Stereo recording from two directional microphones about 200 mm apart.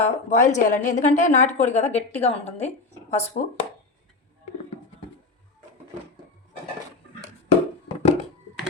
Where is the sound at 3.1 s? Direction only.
35° left (ahead or behind).